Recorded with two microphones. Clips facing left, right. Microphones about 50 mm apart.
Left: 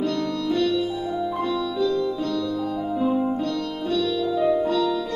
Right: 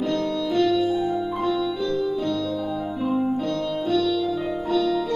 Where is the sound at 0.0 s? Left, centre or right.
Right.